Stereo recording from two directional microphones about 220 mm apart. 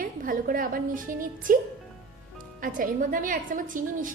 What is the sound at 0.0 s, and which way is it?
A woman's voice, 40° right (ahead or behind).